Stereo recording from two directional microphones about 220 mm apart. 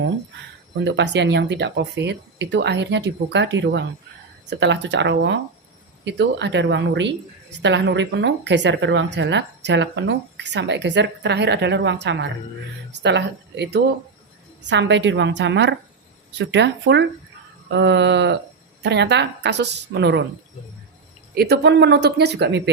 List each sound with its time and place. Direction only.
0.8 s a woman's voice: 55° right (ahead or behind)
21.3 s a woman's voice: 50° right (ahead or behind)